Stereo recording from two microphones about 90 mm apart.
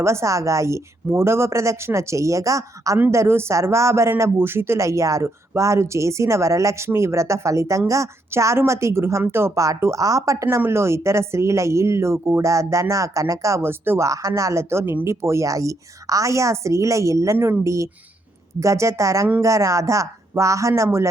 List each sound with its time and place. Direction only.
0.0 s a woman's voice: 30° right (ahead or behind)
10.4 s a woman's voice: 30° right (ahead or behind)
14.1 s a woman's voice: 35° right (ahead or behind)
17.3 s speech: 20° right (ahead or behind)
17.6 s a woman's voice: 35° right (ahead or behind)